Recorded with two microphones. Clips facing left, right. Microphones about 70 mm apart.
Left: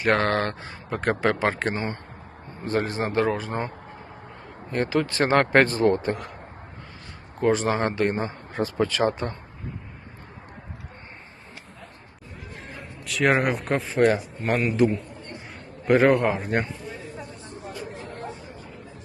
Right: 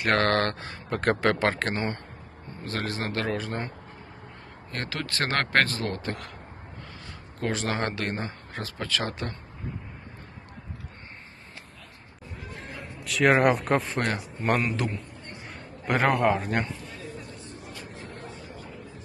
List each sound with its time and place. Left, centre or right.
0.0 s a man's voice: centre
2.7 s speech: left
3.2 s a man's voice: centre
4.7 s a man's voice: centre
7.4 s a man's voice: centre
9.6 s a man's voice: centre
12.5 s a man's voice: centre
15.8 s a man's voice: centre
16.6 s a sound: left
17.9 s a sound: left